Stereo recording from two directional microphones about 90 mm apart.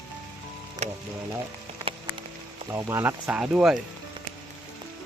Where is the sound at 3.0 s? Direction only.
10° right (ahead or behind).